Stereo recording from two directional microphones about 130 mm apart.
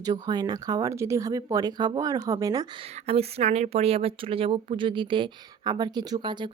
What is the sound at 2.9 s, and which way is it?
Speech, 50° right (ahead or behind).